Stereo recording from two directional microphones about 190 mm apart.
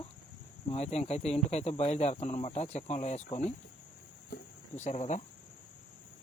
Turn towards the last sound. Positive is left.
turn(degrees=35)  # may be behind; listen again after turning